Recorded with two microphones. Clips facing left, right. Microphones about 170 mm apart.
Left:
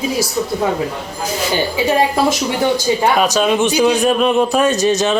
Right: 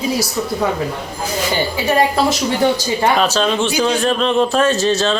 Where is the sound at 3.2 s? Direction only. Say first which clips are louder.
Left 2 dB; 10° left (ahead or behind).